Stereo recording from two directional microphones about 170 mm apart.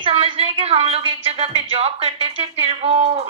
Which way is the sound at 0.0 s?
30° right (ahead or behind).